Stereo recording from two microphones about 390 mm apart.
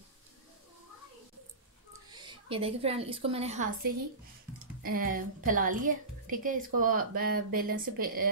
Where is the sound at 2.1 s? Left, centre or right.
Centre.